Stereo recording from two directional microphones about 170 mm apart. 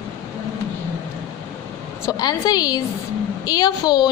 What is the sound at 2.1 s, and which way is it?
A woman's voice, 25° left (ahead or behind).